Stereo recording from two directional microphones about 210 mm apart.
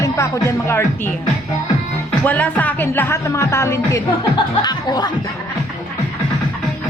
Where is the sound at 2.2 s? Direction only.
10° left (ahead or behind).